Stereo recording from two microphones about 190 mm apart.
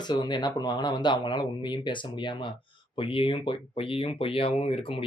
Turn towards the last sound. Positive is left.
turn(degrees=30)  # may be behind; listen again after turning